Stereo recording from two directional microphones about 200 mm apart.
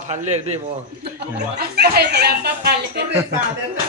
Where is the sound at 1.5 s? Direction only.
55° right (ahead or behind).